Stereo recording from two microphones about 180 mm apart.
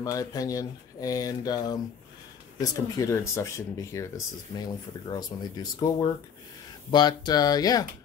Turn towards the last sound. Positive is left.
turn(degrees=20)  # may be behind; listen again after turning